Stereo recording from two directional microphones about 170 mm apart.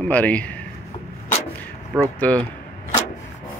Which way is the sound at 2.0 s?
10° left (ahead or behind).